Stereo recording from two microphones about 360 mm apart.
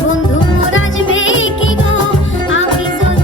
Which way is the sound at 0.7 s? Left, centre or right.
Left.